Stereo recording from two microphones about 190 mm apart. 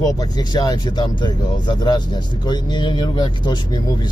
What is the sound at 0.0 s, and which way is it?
Speech, 20° left (ahead or behind).